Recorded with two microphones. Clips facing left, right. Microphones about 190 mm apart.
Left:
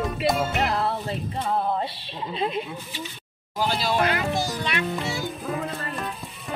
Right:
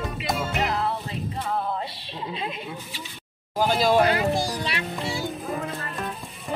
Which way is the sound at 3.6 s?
45° right (ahead or behind).